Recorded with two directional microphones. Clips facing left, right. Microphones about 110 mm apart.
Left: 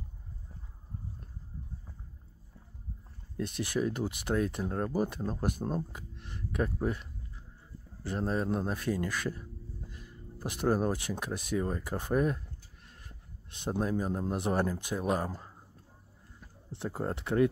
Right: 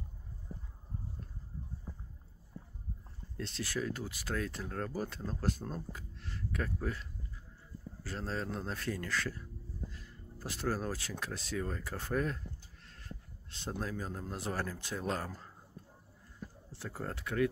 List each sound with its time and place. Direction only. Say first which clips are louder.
3.3 s speech: left 6 dB; 15° left (ahead or behind)
13.5 s speech: left 8 dB; 20° left (ahead or behind)
16.7 s speech: left 7 dB; 20° left (ahead or behind)